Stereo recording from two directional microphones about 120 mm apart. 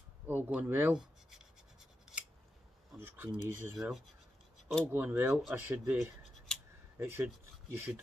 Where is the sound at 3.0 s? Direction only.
15° right (ahead or behind).